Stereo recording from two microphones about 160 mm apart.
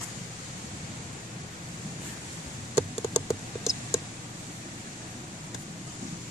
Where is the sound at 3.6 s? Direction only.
5° right (ahead or behind).